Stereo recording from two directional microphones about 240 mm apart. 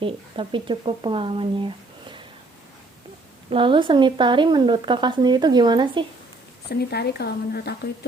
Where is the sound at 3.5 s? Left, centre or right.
Right.